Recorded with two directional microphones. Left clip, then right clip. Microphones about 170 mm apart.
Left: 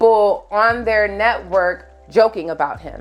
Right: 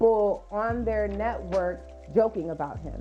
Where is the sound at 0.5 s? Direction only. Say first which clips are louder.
Left 12 dB; 10° left (ahead or behind).